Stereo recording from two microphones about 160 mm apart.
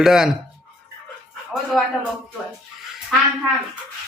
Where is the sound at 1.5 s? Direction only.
5° right (ahead or behind).